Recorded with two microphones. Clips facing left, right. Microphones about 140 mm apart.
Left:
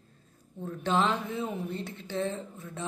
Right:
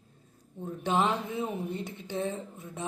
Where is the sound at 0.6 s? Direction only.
15° right (ahead or behind).